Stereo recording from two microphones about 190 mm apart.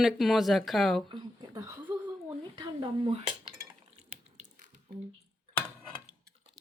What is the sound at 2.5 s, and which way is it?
Speech, 25° right (ahead or behind).